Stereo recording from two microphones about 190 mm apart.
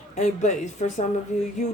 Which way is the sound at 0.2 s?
40° left (ahead or behind).